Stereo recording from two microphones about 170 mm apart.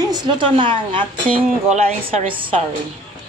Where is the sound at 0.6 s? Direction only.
30° right (ahead or behind).